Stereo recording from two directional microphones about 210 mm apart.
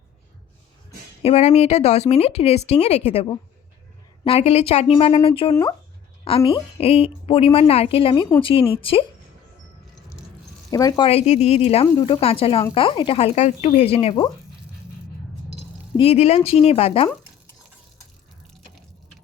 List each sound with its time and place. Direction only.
1.2 s speech: 30° left (ahead or behind)
10.7 s speech: 15° left (ahead or behind)
16.0 s speech: 30° left (ahead or behind)